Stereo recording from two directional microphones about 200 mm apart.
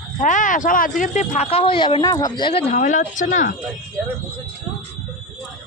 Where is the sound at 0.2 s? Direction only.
40° left (ahead or behind).